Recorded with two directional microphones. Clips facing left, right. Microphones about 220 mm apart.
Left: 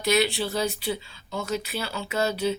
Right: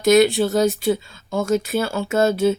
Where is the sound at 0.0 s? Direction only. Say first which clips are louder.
Right 9 dB; 45° right (ahead or behind).